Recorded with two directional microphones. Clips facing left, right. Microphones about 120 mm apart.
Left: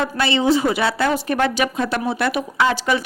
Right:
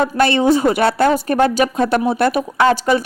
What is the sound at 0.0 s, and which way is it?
A woman's voice, 50° right (ahead or behind).